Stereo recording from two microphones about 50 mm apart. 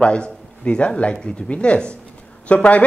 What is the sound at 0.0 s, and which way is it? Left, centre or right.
A man's voice, left.